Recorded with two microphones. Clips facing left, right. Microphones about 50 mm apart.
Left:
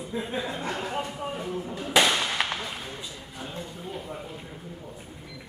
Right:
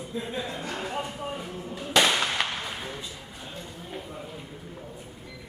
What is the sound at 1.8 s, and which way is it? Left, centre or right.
Firecracker, centre.